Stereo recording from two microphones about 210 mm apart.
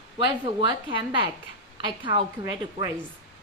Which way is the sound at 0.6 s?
25° right (ahead or behind).